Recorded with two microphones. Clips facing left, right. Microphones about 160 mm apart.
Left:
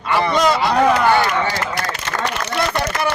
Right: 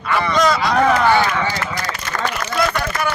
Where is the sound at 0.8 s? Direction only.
5° left (ahead or behind).